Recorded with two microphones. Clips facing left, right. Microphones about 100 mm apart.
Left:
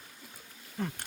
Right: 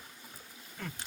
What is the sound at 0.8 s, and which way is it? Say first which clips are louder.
Speech: left 7 dB; 35° left (ahead or behind).